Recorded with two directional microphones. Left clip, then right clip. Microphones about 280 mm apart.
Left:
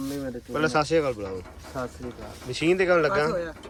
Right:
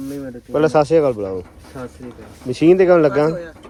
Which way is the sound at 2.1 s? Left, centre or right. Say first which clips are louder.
Right 7 dB; centre.